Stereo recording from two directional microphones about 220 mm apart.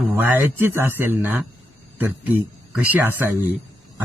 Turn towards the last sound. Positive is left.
turn(degrees=-10)  # may be behind; listen again after turning